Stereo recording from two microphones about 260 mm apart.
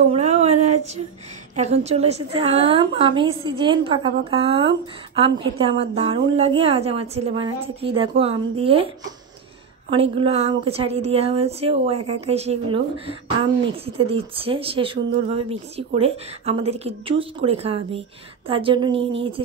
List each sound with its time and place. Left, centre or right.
0.1 s a sound: right
1.5 s a woman's voice: right
9.8 s a woman's voice: right